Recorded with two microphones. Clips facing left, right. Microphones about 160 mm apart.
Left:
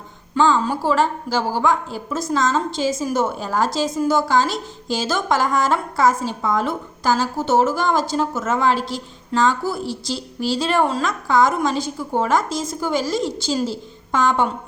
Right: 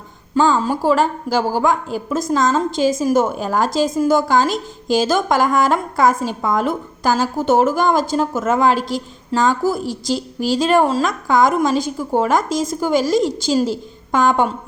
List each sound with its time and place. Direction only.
0.3 s a woman's voice: 45° right (ahead or behind)